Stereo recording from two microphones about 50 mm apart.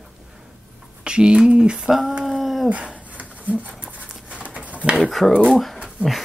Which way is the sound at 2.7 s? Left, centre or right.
Right.